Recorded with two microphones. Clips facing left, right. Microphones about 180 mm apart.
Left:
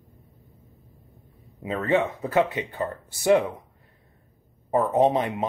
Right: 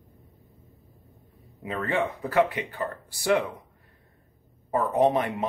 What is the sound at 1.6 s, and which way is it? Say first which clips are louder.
Speech: left 4 dB; 25° left (ahead or behind).